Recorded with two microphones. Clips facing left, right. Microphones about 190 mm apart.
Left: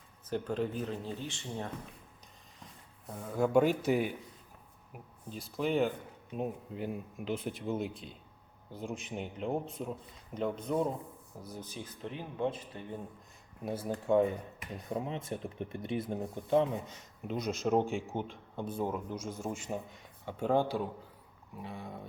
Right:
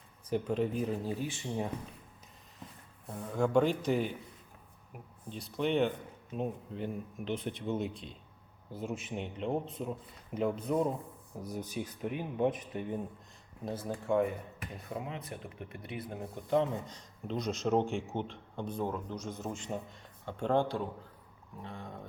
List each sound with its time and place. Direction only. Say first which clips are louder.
0.3 s speech: right 2 dB; centre (ahead or behind)
3.1 s speech: left 1 dB; centre (ahead or behind)
5.3 s speech: right 1 dB; centre (ahead or behind)
11.3 s speech: right 6 dB; 15° right (ahead or behind)
13.7 s speech: left 1 dB; 10° left (ahead or behind)
14.9 s speech: left 4 dB; 25° left (ahead or behind); by 22.0 s 10° left (ahead or behind)